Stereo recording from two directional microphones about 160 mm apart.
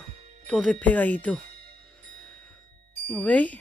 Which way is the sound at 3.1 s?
10° left (ahead or behind).